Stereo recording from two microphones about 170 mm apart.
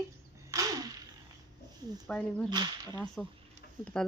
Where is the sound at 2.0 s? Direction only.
10° left (ahead or behind).